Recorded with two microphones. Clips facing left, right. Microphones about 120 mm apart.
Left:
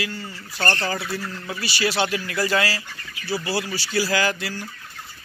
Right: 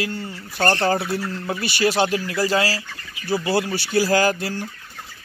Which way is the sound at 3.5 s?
55° right (ahead or behind).